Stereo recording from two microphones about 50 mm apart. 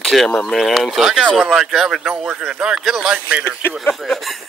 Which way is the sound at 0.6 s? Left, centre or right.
Centre.